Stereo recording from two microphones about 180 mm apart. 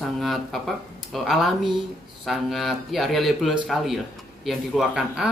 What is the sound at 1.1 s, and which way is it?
Speech, centre (ahead or behind).